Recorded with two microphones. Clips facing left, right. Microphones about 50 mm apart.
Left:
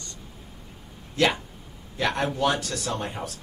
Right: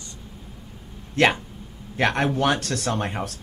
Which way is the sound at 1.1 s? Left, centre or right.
Right.